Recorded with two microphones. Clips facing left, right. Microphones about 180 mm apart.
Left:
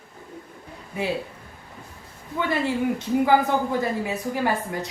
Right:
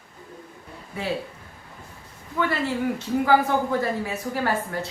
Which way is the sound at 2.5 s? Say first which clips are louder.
Left 6 dB; 15° left (ahead or behind).